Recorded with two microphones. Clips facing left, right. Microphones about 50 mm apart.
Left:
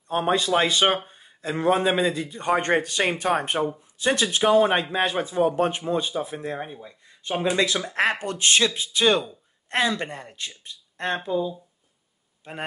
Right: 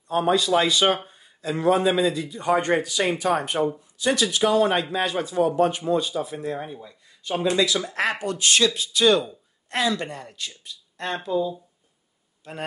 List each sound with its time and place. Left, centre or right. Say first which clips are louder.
0.1 s speech: right 2 dB; left
4.4 s speech: left 3 dB; left
10.6 s a sound: left 4 dB; left
12.5 s speech: even; left